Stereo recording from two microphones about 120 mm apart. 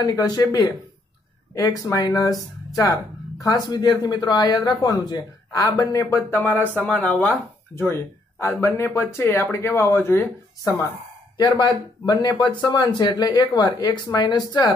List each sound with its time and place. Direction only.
0.0 s speech: 30° left (ahead or behind)
6.3 s speech: 15° left (ahead or behind)
11.3 s speech: 35° left (ahead or behind)